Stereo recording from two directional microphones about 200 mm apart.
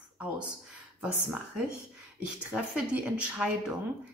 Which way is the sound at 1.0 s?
Centre (ahead or behind).